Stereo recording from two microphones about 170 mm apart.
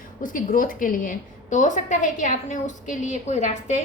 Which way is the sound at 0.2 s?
50° left (ahead or behind).